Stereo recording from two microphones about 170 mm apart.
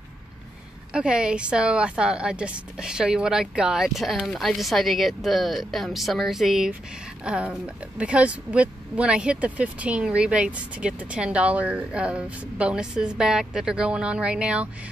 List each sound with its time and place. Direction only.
0.9 s a woman's voice: 5° right (ahead or behind)